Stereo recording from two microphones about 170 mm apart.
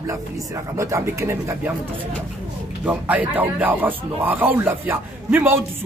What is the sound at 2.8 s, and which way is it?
Speech, 10° right (ahead or behind).